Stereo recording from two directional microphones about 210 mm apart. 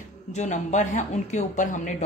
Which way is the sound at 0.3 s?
35° left (ahead or behind).